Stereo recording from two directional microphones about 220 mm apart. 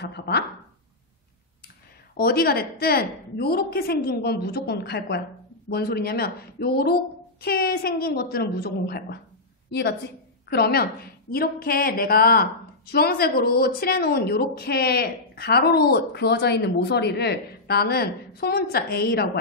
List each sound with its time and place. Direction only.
0.0 s speech: 50° left (ahead or behind)
2.1 s a woman's voice: 45° left (ahead or behind)